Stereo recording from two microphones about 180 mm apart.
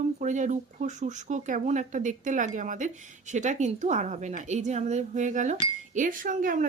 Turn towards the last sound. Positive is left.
turn(degrees=-50)  # may be behind; listen again after turning